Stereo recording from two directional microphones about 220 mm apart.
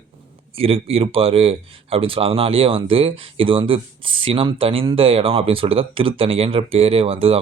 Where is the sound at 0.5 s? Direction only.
25° right (ahead or behind).